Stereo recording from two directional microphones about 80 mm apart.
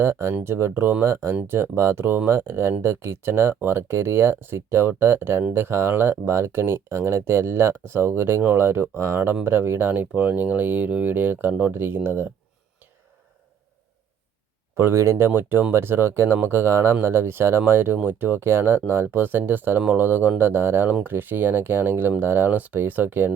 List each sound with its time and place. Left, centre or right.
0.0 s speech: right
14.8 s speech: right